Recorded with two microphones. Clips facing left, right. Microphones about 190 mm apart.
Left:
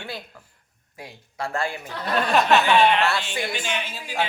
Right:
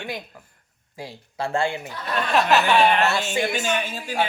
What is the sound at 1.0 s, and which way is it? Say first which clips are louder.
Speech: right 3 dB; 30° right (ahead or behind).